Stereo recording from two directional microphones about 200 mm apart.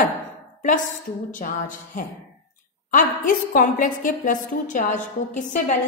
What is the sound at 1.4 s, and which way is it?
A woman's voice, 40° left (ahead or behind).